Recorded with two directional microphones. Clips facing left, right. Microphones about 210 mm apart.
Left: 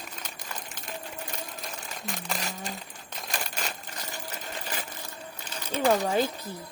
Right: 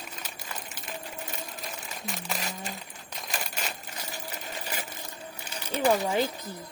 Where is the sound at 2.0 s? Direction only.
Centre (ahead or behind).